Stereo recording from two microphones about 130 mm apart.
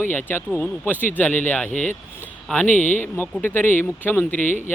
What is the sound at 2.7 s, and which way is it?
Speech, 75° left (ahead or behind).